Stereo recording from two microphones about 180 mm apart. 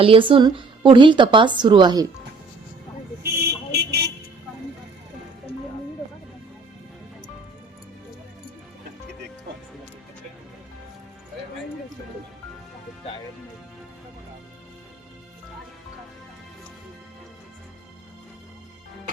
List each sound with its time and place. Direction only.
0.0 s a woman's voice: 30° right (ahead or behind)
3.4 s vehicle: 65° right (ahead or behind)